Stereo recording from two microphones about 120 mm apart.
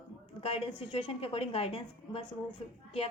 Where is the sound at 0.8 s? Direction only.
45° left (ahead or behind).